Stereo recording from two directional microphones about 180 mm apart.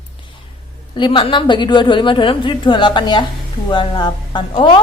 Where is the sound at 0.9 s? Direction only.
25° left (ahead or behind).